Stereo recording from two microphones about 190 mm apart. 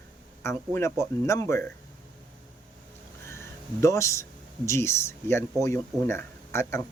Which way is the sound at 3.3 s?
15° left (ahead or behind).